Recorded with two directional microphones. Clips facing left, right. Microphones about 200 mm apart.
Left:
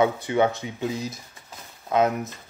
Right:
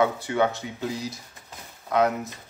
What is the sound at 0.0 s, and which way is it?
Speech, 20° left (ahead or behind).